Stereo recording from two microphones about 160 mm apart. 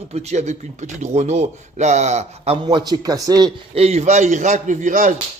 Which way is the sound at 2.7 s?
25° right (ahead or behind).